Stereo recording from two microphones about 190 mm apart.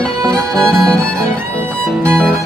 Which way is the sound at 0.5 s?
5° left (ahead or behind).